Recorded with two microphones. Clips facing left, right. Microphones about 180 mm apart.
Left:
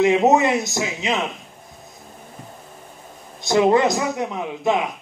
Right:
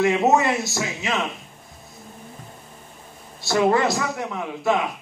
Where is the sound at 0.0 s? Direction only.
20° left (ahead or behind).